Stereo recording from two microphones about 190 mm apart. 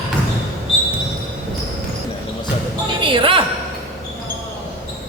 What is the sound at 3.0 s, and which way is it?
Speech, 25° right (ahead or behind).